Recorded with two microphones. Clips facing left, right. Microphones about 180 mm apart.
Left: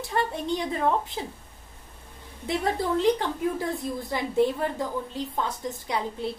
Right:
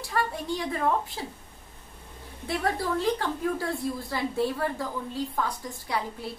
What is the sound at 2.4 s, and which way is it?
A woman's voice, 20° left (ahead or behind).